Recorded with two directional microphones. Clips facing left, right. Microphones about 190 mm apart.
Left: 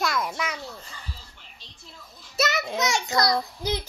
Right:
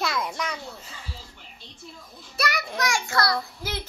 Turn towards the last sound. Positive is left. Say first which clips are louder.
# left 3 dB
turn(degrees=15)  # may be behind; listen again after turning